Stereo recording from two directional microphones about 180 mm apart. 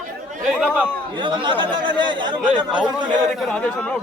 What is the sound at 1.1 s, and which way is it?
Speech, 25° right (ahead or behind).